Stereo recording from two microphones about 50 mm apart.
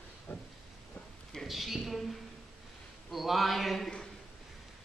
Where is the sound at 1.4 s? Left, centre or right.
Centre.